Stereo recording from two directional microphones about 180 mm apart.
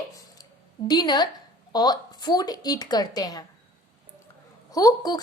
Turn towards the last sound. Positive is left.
turn(degrees=20)  # may be behind; listen again after turning